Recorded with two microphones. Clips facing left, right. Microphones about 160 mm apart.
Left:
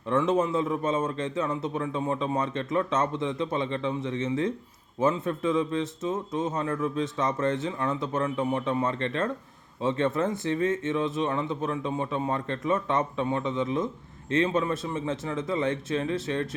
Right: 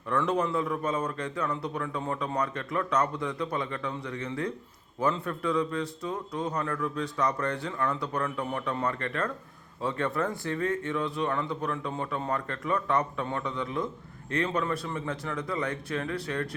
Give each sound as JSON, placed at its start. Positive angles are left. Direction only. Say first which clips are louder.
{"t": 0.1, "sound": "a man's voice", "louder": "left 3 dB", "side_deg": 25}